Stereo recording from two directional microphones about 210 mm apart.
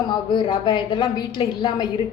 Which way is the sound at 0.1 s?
20° left (ahead or behind).